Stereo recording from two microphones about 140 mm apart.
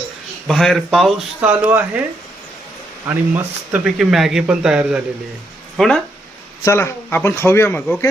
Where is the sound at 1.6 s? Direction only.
15° right (ahead or behind).